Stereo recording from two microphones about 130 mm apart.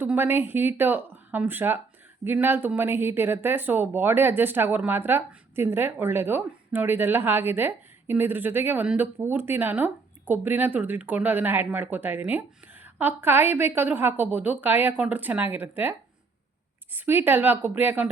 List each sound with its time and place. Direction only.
0.0 s speech: 15° right (ahead or behind)